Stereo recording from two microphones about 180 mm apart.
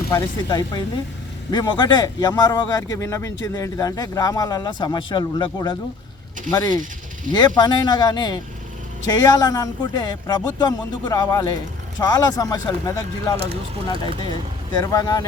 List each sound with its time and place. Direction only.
0.1 s speech: 20° left (ahead or behind)
13.3 s speech: 35° right (ahead or behind)
14.8 s speech: 20° left (ahead or behind)